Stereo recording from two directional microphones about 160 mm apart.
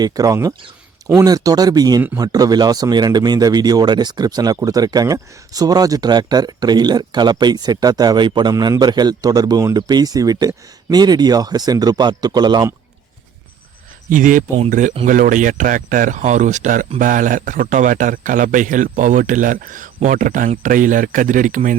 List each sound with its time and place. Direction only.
0.0 s speech: 20° right (ahead or behind)
14.1 s a man's voice: 55° right (ahead or behind)